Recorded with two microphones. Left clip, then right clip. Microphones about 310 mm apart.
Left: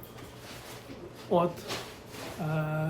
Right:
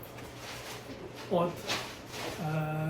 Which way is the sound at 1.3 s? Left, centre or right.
Centre.